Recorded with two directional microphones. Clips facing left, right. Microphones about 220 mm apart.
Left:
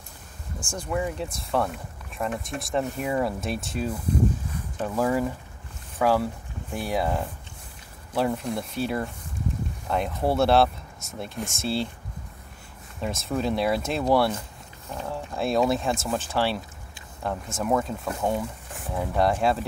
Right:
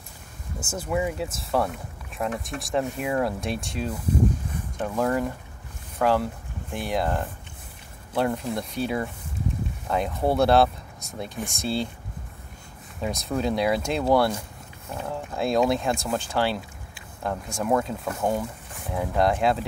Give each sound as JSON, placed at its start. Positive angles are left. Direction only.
{"t": 0.7, "sound": "speech", "side_deg": -5}
{"t": 13.0, "sound": "speech", "side_deg": 0}